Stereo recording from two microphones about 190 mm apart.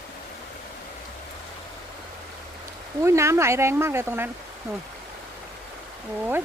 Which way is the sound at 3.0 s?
15° right (ahead or behind).